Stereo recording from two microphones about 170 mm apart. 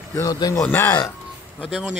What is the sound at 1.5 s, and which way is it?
Speech, centre (ahead or behind).